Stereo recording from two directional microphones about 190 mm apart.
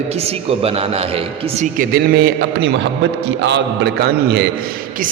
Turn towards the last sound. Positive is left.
turn(degrees=-60)  # may be behind; listen again after turning